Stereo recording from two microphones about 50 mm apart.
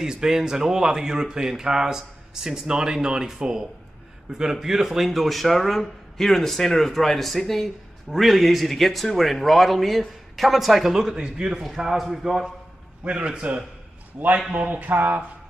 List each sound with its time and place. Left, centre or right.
0.0 s speech: centre
13.0 s a man's voice: right